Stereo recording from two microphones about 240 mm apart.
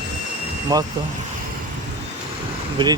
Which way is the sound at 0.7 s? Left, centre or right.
Centre.